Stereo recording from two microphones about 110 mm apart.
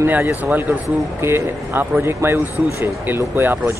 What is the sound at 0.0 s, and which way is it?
Speech, 20° right (ahead or behind).